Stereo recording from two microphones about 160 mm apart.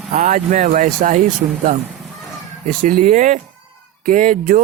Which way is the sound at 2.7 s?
55° right (ahead or behind).